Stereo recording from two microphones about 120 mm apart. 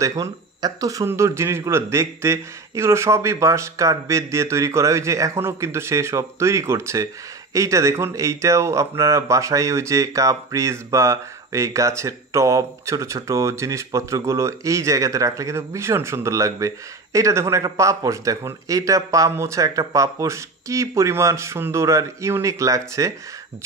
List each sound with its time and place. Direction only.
0.0 s speech: 30° right (ahead or behind)